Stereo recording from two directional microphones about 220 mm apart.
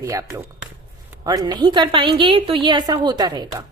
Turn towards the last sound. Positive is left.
turn(degrees=-20)  # may be behind; listen again after turning